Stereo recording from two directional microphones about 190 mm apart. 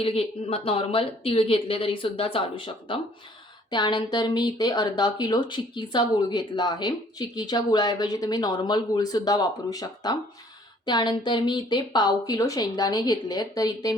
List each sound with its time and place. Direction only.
0.0 s speech: 30° left (ahead or behind)